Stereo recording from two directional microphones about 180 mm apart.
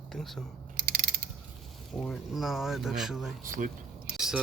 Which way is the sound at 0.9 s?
55° right (ahead or behind).